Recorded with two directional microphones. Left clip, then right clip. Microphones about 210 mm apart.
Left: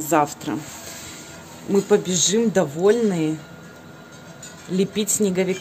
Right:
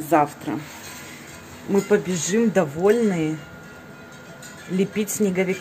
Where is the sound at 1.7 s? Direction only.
10° left (ahead or behind).